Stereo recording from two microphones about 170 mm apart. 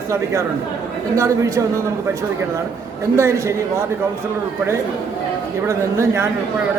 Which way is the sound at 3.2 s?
15° right (ahead or behind).